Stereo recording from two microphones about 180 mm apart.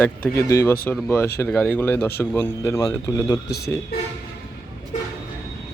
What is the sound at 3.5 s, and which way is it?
Speech, 65° left (ahead or behind).